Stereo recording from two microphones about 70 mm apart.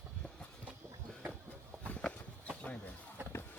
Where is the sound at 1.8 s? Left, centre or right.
Centre.